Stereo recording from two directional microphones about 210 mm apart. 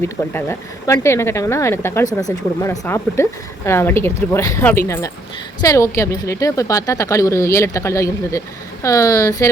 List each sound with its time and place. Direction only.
0.0 s speech: 10° left (ahead or behind)